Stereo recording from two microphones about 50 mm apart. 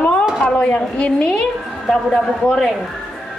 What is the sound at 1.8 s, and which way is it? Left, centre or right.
Speech, centre.